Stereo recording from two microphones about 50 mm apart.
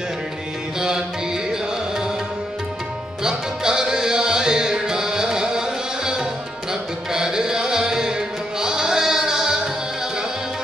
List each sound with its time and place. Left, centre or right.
0.7 s music: centre
3.3 s music: centre